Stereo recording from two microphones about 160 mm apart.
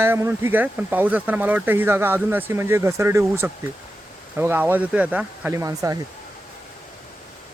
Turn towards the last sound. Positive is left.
turn(degrees=-20)  # may be behind; listen again after turning